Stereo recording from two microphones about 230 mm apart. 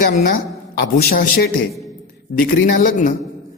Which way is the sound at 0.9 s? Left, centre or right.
Left.